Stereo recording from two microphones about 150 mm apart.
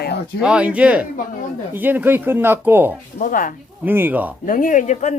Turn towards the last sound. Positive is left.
turn(degrees=55)  # may be behind; listen again after turning